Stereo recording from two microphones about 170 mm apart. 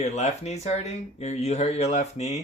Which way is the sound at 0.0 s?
40° left (ahead or behind).